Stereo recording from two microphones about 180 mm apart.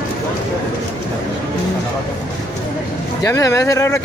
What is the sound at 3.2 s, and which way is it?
Speech, 15° left (ahead or behind).